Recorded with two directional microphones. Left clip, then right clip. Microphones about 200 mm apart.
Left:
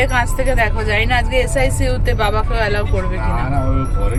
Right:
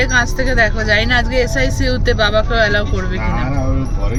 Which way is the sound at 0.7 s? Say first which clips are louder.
Right 3 dB; 20° right (ahead or behind).